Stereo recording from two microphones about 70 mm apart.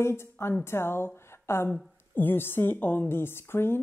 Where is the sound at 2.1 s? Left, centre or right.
Left.